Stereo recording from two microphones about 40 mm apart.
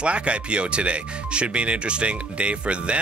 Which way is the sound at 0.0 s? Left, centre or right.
Right.